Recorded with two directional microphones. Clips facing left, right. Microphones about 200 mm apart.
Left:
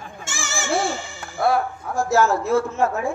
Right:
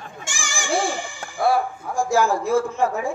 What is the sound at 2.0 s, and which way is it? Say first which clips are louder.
Speech: left 1 dB; 10° right (ahead or behind).